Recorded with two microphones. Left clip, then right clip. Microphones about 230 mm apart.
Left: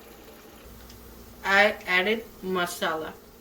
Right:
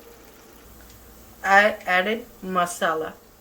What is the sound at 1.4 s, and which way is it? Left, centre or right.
A woman's voice, centre.